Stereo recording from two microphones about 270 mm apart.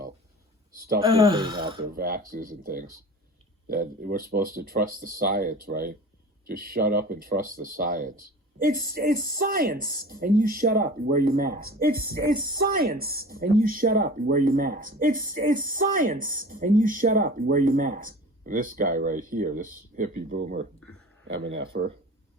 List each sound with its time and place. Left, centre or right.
1.0 s speech: centre
1.8 s speech: right
21.2 s speech: right